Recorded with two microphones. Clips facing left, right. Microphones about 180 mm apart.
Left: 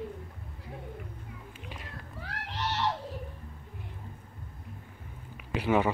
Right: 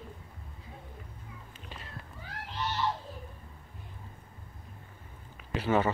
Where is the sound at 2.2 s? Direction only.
75° left (ahead or behind).